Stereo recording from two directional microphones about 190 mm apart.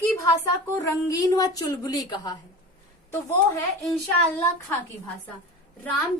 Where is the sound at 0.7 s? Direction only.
15° left (ahead or behind).